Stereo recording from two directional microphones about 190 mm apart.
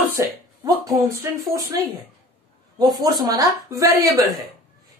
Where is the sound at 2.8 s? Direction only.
20° right (ahead or behind).